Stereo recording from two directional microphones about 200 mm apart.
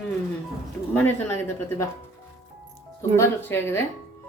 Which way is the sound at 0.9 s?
10° left (ahead or behind).